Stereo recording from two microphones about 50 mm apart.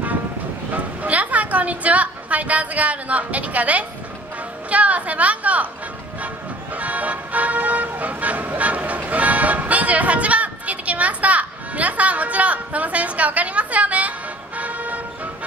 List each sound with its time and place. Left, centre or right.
1.0 s a sound: right
4.6 s a woman's voice: right
6.2 s music: right